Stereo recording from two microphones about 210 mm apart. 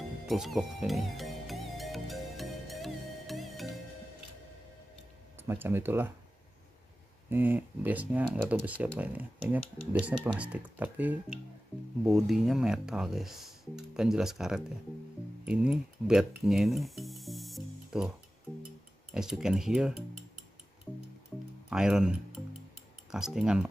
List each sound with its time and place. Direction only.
0.3 s music: centre (ahead or behind)
5.4 s speech: 10° right (ahead or behind)
7.2 s speech: 10° right (ahead or behind)
15.4 s a sound: 5° right (ahead or behind)
19.1 s speech: 5° right (ahead or behind)
21.6 s speech: 5° right (ahead or behind)
23.1 s speech: 5° right (ahead or behind)